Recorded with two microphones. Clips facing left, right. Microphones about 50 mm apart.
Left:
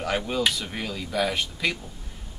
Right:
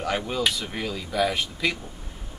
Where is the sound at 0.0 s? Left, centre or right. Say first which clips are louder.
Even; centre.